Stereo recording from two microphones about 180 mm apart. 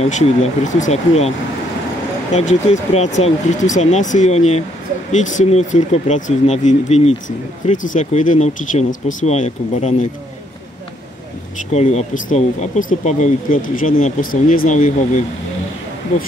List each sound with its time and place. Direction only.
0.0 s speech: 40° left (ahead or behind)
2.3 s speech: 40° left (ahead or behind)
11.7 s speech: 40° left (ahead or behind)